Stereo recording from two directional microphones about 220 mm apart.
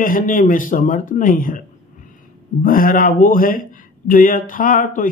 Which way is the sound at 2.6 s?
40° left (ahead or behind).